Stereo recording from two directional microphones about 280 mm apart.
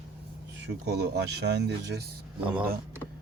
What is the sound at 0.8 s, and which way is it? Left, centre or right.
Speech, right.